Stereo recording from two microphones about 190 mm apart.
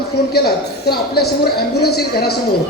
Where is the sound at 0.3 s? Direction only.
55° left (ahead or behind).